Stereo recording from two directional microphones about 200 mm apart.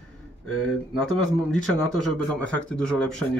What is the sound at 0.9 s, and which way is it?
Speech, centre (ahead or behind).